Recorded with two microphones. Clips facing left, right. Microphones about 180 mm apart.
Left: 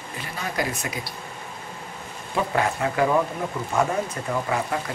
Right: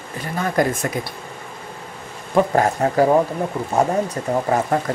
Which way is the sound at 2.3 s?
40° right (ahead or behind).